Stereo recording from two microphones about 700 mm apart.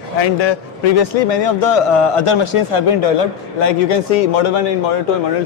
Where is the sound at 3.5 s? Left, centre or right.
Left.